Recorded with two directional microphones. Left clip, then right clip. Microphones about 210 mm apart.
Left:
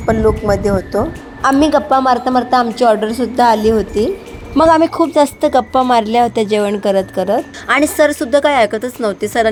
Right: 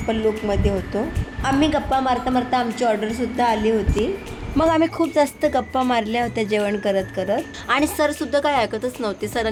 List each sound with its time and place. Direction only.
0.1 s speech: 25° left (ahead or behind)